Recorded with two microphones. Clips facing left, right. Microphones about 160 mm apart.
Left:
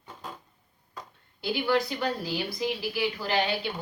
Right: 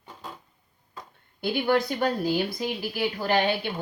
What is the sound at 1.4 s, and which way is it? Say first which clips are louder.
Speech: right 2 dB; 50° right (ahead or behind).